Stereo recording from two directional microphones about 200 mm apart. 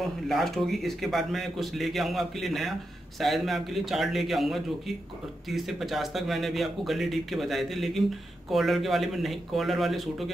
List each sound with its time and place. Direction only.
0.0 s speech: centre (ahead or behind)